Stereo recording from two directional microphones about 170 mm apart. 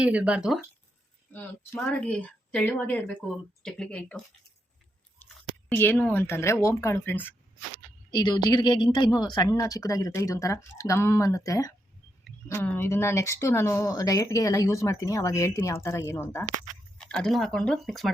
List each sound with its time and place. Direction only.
0.0 s speech: 5° right (ahead or behind)
1.3 s speech: 10° left (ahead or behind)
5.2 s speech: 10° left (ahead or behind)
8.1 s speech: 25° left (ahead or behind); by 18.1 s centre (ahead or behind)